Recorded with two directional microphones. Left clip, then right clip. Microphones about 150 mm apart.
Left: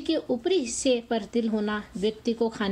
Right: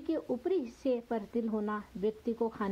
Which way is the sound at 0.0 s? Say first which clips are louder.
Left 7 dB; 15° left (ahead or behind).